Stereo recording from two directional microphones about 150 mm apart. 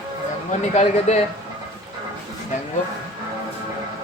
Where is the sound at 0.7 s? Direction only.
50° left (ahead or behind).